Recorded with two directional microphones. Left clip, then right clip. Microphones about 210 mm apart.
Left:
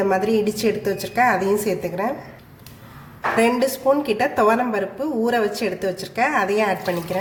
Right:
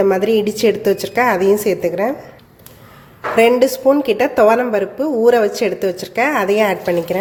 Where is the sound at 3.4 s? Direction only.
35° right (ahead or behind).